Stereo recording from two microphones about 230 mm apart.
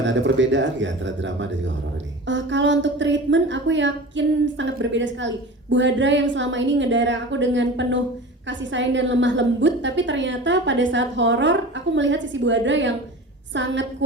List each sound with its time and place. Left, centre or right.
0.0 s a woman's voice: right